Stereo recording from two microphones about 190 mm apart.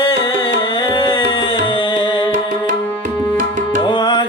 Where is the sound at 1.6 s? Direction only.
25° left (ahead or behind).